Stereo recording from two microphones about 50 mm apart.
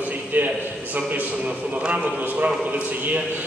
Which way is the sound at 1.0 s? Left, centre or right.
Right.